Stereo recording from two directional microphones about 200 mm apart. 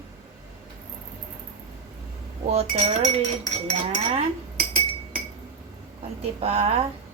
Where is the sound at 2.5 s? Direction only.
30° right (ahead or behind).